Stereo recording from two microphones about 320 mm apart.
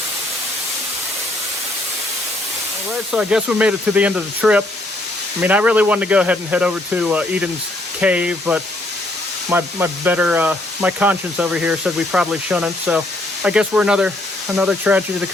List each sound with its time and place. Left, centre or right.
3.1 s speech: centre